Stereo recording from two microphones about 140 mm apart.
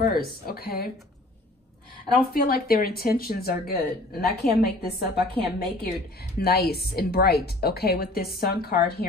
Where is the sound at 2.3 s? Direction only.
90° left.